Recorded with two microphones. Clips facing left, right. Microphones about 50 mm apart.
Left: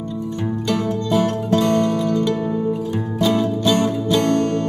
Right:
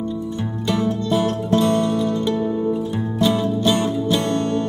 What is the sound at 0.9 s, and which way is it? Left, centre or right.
Music, left.